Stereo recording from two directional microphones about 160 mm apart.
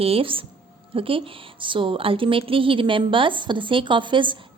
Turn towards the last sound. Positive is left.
turn(degrees=-30)  # may be behind; listen again after turning